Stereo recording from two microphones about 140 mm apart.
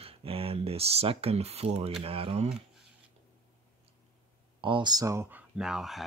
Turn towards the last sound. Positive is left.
turn(degrees=0)  # may be behind; listen again after turning